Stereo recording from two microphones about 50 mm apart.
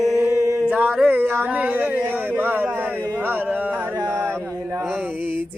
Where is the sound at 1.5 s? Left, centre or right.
Right.